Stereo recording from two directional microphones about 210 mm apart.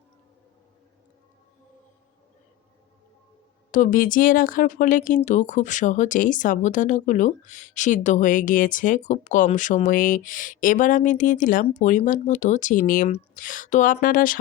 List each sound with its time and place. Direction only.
3.7 s speech: 40° left (ahead or behind)